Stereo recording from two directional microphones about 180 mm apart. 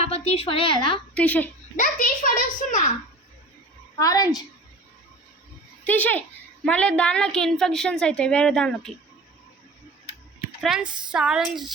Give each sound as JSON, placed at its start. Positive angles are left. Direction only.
{"t": 0.1, "sound": "a woman's voice", "side_deg": 35}
{"t": 1.1, "sound": "a woman's voice", "side_deg": 10}
{"t": 1.7, "sound": "a sound", "side_deg": 45}
{"t": 4.0, "sound": "a woman's voice", "side_deg": 20}
{"t": 5.8, "sound": "a woman's voice", "side_deg": 10}
{"t": 10.6, "sound": "a woman's voice", "side_deg": -5}